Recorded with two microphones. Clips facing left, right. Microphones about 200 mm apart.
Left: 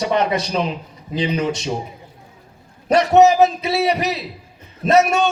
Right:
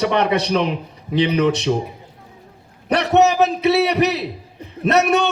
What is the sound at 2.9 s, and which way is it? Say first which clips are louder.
A man's voice: left 3 dB; 65° right (ahead or behind).